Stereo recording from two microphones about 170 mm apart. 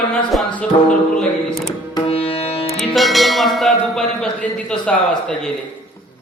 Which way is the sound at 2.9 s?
Centre (ahead or behind).